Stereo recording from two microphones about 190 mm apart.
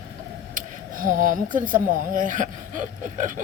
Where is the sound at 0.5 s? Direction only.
45° right (ahead or behind).